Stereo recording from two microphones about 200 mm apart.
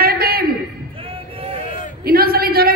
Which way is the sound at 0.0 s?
50° right (ahead or behind).